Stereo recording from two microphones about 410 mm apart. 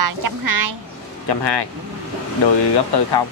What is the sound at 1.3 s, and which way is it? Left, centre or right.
Speech, left.